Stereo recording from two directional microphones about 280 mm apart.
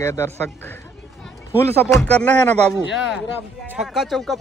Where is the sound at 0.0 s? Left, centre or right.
Centre.